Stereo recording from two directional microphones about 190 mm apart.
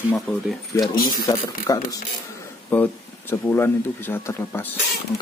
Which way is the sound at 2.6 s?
10° left (ahead or behind).